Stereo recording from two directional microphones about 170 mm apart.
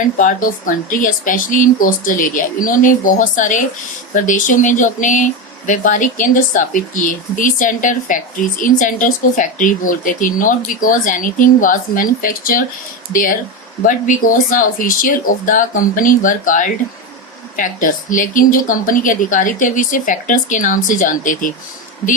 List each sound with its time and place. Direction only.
0.2 s speech: 50° left (ahead or behind)